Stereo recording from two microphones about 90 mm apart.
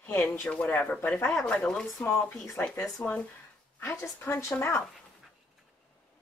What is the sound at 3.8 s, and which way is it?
A woman's voice, 30° left (ahead or behind).